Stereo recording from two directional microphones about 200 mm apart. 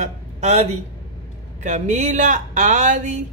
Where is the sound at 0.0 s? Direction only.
35° right (ahead or behind).